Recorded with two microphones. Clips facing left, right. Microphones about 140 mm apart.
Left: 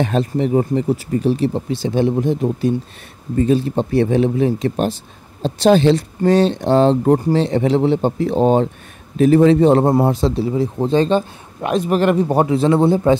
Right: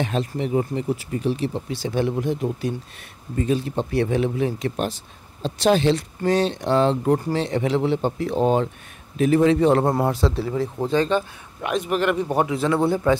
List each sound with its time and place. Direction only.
0.0 s a man's voice: 40° left (ahead or behind); by 10.9 s 15° left (ahead or behind)
10.9 s a man's voice: 30° left (ahead or behind)